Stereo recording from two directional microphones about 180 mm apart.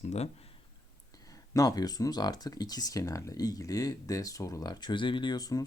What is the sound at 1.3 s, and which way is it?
Speech, 20° left (ahead or behind).